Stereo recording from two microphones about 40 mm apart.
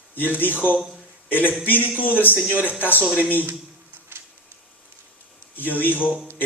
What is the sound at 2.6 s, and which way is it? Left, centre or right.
Speech, right.